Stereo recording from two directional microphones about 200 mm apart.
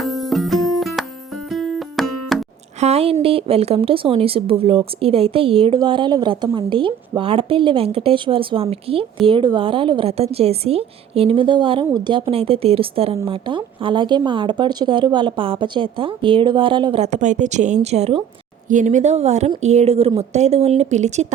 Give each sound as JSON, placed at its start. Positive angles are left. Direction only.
{"t": 0.0, "sound": "music", "side_deg": 0}
{"t": 2.8, "sound": "speech", "side_deg": -30}